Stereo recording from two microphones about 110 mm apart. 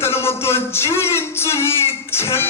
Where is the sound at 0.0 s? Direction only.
20° left (ahead or behind).